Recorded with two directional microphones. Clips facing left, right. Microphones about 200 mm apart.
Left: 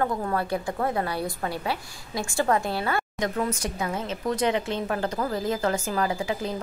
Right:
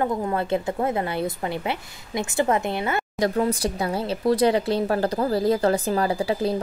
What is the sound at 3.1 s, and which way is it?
A woman's voice, 35° right (ahead or behind).